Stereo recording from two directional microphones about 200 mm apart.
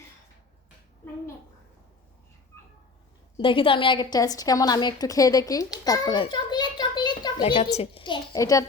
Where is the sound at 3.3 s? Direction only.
25° left (ahead or behind).